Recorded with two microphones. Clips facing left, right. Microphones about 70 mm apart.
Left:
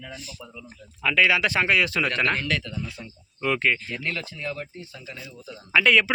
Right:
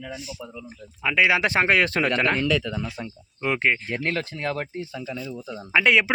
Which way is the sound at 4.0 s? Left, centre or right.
Right.